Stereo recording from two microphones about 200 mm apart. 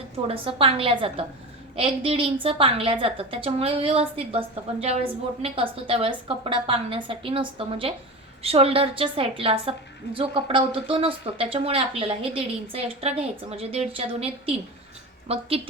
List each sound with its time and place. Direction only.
0.3 s a woman's voice: 30° right (ahead or behind)